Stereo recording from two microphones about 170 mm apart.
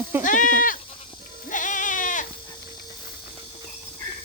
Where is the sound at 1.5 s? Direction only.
50° left (ahead or behind).